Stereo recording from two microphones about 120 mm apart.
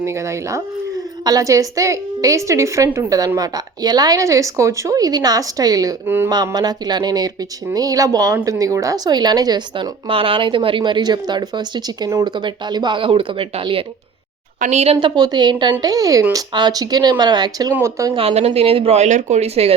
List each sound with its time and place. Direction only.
0.0 s a woman's voice: 25° right (ahead or behind)
6.1 s a woman's voice: 20° right (ahead or behind)
6.3 s a woman's voice: 35° right (ahead or behind); by 13.8 s 50° right (ahead or behind)
14.6 s speech: 70° right (ahead or behind)
15.0 s a woman's voice: 35° right (ahead or behind)
18.1 s speech: 55° right (ahead or behind)